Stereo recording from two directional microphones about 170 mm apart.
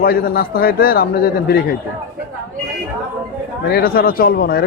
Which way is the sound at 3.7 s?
60° left (ahead or behind).